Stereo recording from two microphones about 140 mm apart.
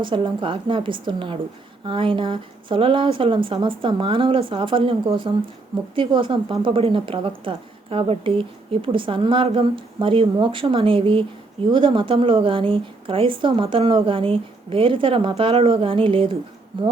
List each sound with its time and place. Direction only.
0.0 s a woman's voice: 35° right (ahead or behind)